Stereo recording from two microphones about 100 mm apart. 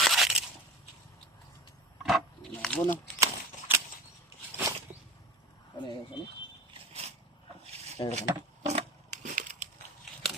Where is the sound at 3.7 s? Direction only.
20° right (ahead or behind).